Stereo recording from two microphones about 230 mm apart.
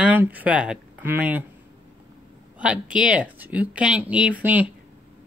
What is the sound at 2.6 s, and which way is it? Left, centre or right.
Speech, centre.